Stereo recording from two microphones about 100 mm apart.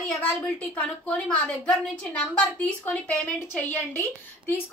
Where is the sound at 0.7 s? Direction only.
15° left (ahead or behind).